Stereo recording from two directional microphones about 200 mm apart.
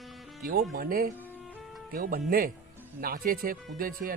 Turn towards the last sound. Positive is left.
turn(degrees=-45)  # may be behind; listen again after turning